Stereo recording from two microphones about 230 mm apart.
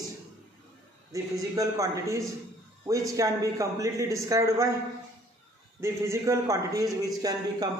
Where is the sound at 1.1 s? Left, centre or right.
Centre.